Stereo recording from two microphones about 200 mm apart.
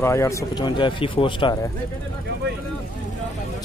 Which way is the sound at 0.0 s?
15° left (ahead or behind).